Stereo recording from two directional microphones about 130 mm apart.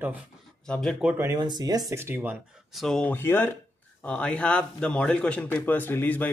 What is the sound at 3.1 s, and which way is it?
A man's voice, 15° left (ahead or behind).